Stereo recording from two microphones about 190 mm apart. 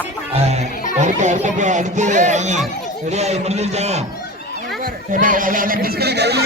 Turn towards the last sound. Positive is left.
turn(degrees=-60)  # may be behind; listen again after turning